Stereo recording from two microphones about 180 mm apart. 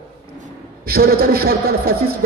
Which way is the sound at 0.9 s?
55° right (ahead or behind).